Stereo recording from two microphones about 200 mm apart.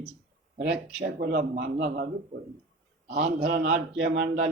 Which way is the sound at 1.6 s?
60° right (ahead or behind).